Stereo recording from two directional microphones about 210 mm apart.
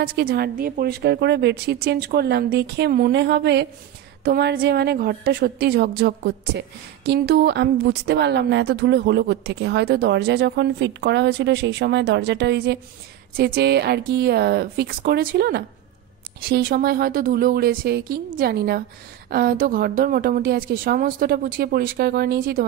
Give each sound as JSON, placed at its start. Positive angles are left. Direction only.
{"t": 0.0, "sound": "a woman's voice", "side_deg": -45}